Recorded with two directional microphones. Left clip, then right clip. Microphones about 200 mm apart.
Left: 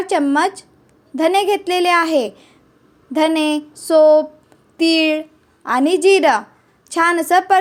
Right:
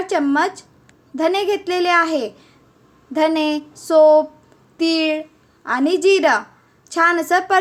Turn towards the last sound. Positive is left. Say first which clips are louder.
# left 3 dB
turn(degrees=15)  # may be behind; listen again after turning